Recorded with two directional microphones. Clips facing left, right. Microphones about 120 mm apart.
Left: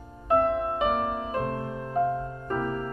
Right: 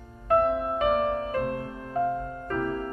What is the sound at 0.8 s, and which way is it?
Music, 10° left (ahead or behind).